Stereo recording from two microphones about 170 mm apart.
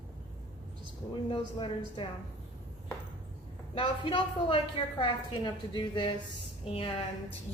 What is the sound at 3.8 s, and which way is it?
A woman's voice, 30° left (ahead or behind).